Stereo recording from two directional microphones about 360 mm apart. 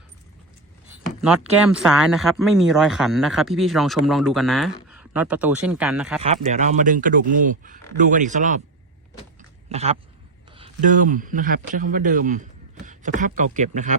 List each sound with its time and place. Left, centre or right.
1.2 s speech: centre
6.2 s speech: centre
9.7 s speech: centre